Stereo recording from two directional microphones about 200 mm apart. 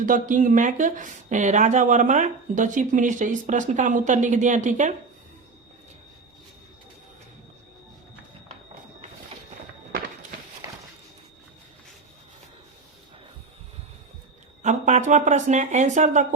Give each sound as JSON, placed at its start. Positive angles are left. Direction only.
{"t": 0.0, "sound": "speech", "side_deg": -40}
{"t": 10.6, "sound": "a sound", "side_deg": -15}
{"t": 14.6, "sound": "speech", "side_deg": -35}